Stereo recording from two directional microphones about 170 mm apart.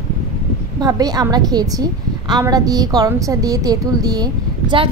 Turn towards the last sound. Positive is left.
turn(degrees=-30)  # may be behind; listen again after turning